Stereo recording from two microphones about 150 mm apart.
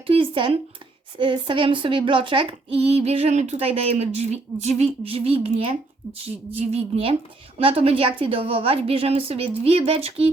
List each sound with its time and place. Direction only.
0.1 s speech: 35° right (ahead or behind)